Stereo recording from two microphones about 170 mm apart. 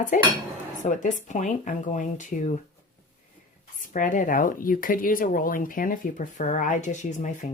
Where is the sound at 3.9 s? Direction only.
50° left (ahead or behind).